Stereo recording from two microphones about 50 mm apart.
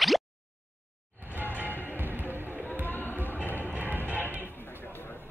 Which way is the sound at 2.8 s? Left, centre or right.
Left.